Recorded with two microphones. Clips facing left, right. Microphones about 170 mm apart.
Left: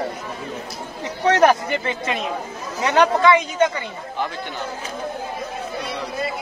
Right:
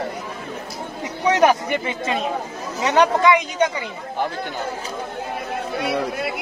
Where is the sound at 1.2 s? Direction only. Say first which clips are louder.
Left 1 dB; 15° right (ahead or behind).